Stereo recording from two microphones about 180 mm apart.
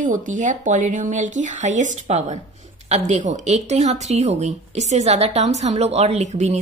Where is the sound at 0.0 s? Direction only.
45° right (ahead or behind).